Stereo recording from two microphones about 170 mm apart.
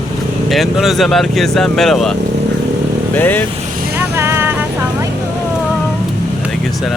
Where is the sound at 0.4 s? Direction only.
Centre (ahead or behind).